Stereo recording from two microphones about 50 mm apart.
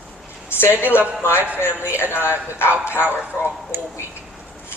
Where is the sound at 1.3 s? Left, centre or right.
Right.